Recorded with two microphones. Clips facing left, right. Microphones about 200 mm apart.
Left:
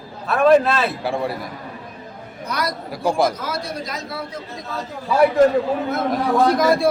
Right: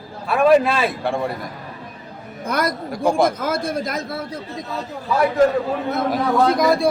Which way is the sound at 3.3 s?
50° right (ahead or behind).